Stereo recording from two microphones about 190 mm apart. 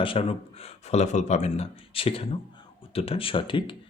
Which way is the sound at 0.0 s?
30° left (ahead or behind).